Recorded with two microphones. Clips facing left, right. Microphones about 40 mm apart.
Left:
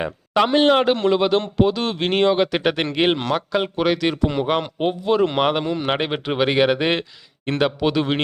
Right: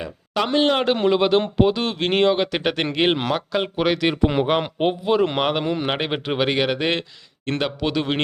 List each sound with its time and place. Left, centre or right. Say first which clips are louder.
0.3 s a man's voice: left 3 dB; centre
4.2 s speech: right 1 dB; right
5.1 s speech: left 4 dB; centre